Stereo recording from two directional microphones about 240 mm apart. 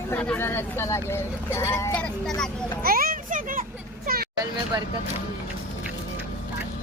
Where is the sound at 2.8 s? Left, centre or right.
Right.